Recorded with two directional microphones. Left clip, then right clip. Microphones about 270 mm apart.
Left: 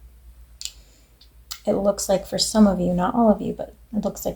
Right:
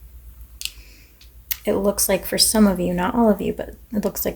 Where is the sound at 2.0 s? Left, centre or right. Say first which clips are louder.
Right 2 dB; right.